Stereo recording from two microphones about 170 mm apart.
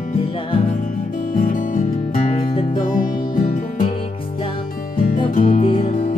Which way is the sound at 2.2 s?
35° left (ahead or behind).